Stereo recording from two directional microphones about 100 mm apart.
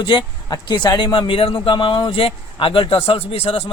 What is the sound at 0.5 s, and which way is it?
A man's voice, 45° left (ahead or behind).